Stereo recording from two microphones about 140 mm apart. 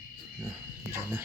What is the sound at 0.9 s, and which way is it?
Speech, 15° right (ahead or behind).